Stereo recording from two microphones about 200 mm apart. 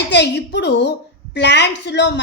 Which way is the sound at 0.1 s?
60° left (ahead or behind).